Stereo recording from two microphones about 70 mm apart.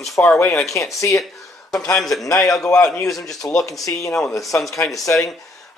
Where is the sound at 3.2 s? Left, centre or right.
Left.